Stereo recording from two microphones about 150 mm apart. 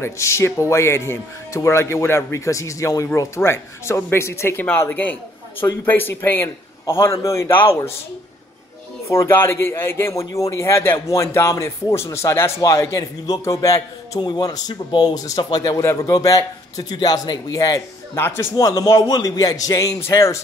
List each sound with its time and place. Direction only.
0.0 s a man's voice: 15° left (ahead or behind)
9.1 s a man's voice: 15° left (ahead or behind)